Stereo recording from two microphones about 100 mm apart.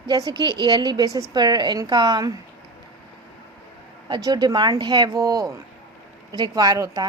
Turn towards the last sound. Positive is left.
turn(degrees=-35)  # may be behind; listen again after turning